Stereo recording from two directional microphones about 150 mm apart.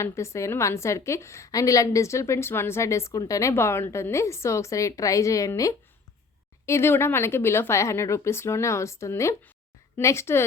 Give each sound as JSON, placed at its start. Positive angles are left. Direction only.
{"t": 0.0, "sound": "a woman's voice", "side_deg": 20}